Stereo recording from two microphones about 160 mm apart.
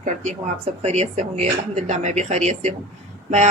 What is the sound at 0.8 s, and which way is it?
Speech, 45° right (ahead or behind).